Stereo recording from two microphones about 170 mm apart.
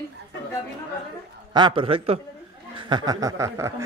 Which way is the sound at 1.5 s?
30° right (ahead or behind).